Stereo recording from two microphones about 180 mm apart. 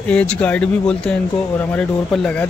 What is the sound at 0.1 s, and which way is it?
Speech, 5° left (ahead or behind).